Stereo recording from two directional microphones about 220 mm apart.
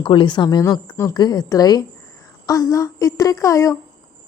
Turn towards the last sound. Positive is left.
turn(degrees=15)  # may be behind; listen again after turning